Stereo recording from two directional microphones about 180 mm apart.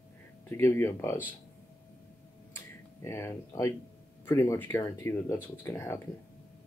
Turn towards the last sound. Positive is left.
turn(degrees=15)  # may be behind; listen again after turning